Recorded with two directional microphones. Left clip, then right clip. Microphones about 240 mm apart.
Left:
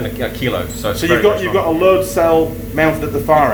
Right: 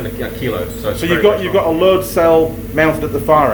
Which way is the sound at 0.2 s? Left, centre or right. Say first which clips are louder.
Left 1 dB; left.